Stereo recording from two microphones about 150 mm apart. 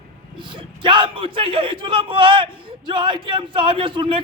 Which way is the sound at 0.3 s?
35° right (ahead or behind).